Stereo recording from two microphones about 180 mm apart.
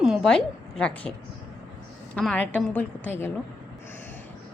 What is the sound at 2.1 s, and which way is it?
A woman's voice, 5° left (ahead or behind).